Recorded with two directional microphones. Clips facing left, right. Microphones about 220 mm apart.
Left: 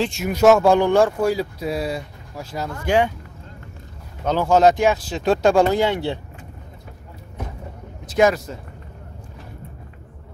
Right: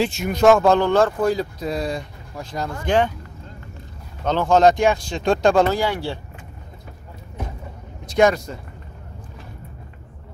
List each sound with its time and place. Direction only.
0.0 s speech: centre (ahead or behind)
4.2 s speech: 10° left (ahead or behind)
5.7 s speech: 20° left (ahead or behind)
8.0 s speech: 5° left (ahead or behind)